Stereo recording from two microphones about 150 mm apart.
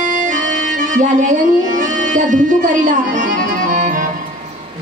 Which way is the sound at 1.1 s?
55° right (ahead or behind).